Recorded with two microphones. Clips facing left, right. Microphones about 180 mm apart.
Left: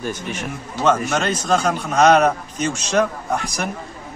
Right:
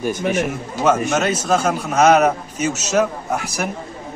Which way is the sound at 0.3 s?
10° right (ahead or behind).